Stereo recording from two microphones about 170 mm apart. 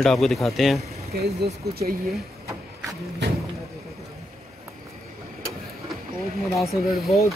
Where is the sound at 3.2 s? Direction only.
90° right.